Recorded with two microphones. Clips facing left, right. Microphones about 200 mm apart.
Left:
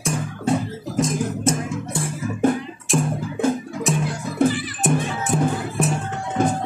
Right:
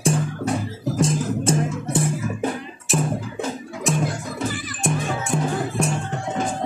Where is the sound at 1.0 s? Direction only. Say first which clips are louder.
Left 1 dB; 30° right (ahead or behind).